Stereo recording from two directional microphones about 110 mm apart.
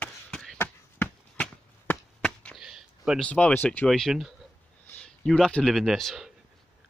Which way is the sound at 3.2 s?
10° left (ahead or behind).